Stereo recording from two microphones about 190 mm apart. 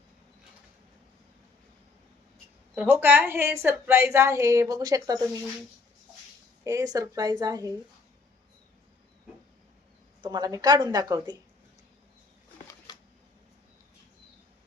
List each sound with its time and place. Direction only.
2.7 s a woman's voice: 10° right (ahead or behind)
6.7 s a woman's voice: 15° right (ahead or behind)
10.2 s a woman's voice: 20° right (ahead or behind)